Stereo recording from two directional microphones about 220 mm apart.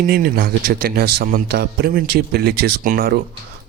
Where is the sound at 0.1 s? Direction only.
40° right (ahead or behind).